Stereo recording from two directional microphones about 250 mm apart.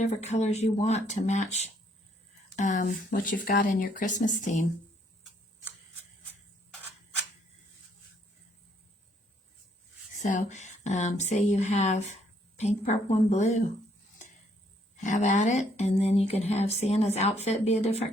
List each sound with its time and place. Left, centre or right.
0.0 s speech: left
10.2 s speech: left
15.0 s speech: left